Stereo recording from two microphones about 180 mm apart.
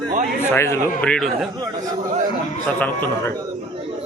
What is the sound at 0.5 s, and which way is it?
Speech, 15° left (ahead or behind).